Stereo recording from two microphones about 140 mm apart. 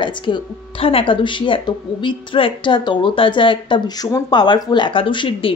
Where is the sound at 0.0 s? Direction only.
35° left (ahead or behind).